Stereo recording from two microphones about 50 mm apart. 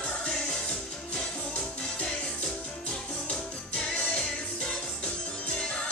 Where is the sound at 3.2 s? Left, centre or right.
Centre.